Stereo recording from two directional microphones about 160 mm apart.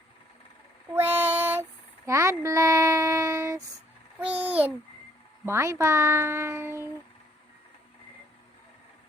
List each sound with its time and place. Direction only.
0.9 s child singing: 10° right (ahead or behind)
4.2 s a sound: 10° right (ahead or behind)
5.5 s speech: 15° right (ahead or behind)